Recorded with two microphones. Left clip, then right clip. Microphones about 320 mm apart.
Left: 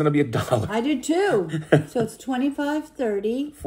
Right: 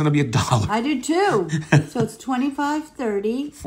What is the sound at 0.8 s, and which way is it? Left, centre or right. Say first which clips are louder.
Speech: right 2 dB; centre.